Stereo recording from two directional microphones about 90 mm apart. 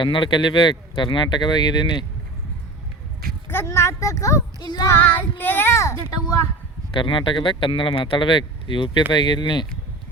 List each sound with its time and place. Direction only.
0.0 s speech: 65° left (ahead or behind)
3.5 s speech: 30° left (ahead or behind)
4.6 s child singing: 55° left (ahead or behind)
4.9 s a child's voice: 20° left (ahead or behind)
6.9 s speech: 70° left (ahead or behind)